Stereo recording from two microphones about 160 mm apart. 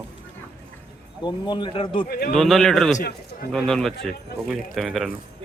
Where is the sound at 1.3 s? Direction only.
30° left (ahead or behind).